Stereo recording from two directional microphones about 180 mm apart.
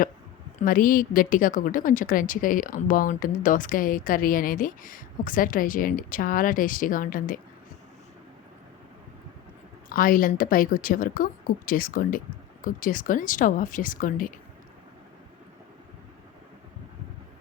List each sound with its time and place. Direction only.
0.6 s a woman's voice: 50° left (ahead or behind)
9.9 s a woman's voice: 50° left (ahead or behind)